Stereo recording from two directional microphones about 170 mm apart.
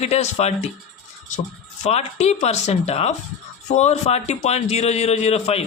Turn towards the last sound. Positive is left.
turn(degrees=40)  # may be behind; listen again after turning